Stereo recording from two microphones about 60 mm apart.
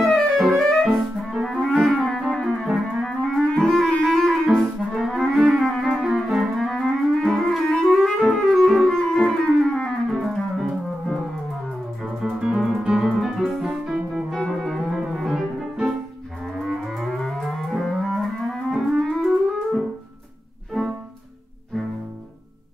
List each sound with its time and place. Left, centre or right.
0.1 s clarinet: centre
2.6 s music: centre
3.1 s clarinet: centre
3.8 s music: centre
4.6 s clarinet: centre
10.2 s music: centre
12.0 s piano: centre
14.3 s music: centre